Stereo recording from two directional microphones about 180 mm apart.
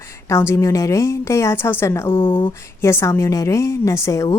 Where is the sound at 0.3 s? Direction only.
15° left (ahead or behind).